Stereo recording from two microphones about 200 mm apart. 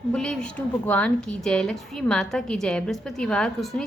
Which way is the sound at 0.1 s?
5° left (ahead or behind).